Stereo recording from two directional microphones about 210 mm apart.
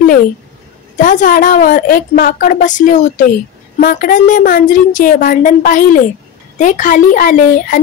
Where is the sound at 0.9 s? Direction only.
40° left (ahead or behind).